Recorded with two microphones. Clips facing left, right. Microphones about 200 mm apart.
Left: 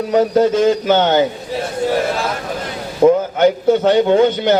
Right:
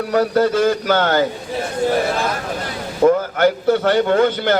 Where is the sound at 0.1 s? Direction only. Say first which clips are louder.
Left 3 dB; 20° left (ahead or behind).